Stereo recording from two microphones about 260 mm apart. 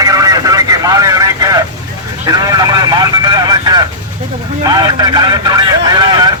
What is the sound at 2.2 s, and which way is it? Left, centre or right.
Vehicle, centre.